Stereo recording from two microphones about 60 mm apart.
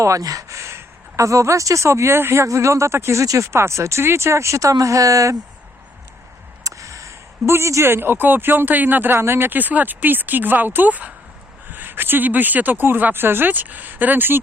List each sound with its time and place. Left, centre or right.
0.0 s speech: right
6.7 s a sound: right
7.9 s speech: right